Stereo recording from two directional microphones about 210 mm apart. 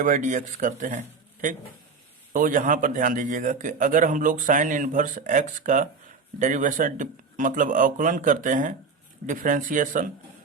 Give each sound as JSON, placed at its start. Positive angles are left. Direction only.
{"t": 0.0, "sound": "a man's voice", "side_deg": -35}